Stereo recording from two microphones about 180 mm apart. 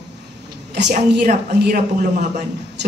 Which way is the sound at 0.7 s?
75° right (ahead or behind).